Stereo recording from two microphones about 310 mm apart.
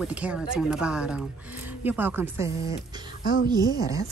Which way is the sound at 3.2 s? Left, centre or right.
Left.